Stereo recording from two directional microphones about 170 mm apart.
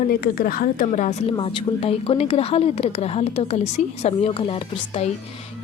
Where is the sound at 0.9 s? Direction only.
40° left (ahead or behind).